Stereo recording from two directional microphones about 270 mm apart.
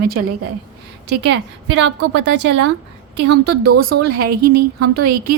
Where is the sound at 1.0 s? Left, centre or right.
Right.